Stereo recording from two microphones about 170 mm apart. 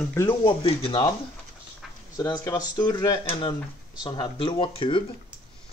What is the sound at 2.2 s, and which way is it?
Speech, 25° left (ahead or behind).